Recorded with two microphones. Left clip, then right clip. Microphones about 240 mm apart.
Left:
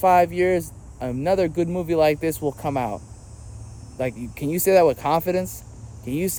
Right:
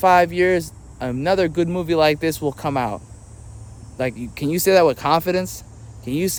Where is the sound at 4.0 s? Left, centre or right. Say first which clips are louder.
Right 3 dB; centre.